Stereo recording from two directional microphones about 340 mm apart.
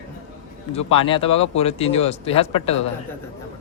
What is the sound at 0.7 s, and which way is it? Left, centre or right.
Speech, centre.